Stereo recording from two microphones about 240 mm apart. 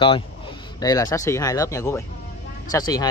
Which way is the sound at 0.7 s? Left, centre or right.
Centre.